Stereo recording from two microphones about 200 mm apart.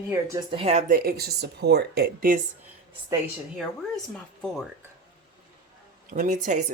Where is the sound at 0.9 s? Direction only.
50° right (ahead or behind).